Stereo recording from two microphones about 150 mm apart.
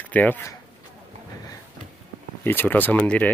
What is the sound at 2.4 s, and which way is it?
Speech, 15° left (ahead or behind).